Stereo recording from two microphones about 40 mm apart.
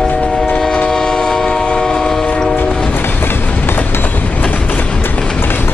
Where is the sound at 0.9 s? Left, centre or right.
Centre.